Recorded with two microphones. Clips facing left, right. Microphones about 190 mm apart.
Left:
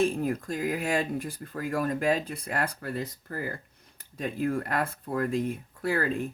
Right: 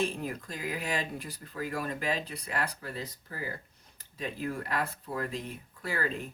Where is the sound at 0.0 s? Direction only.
50° left (ahead or behind).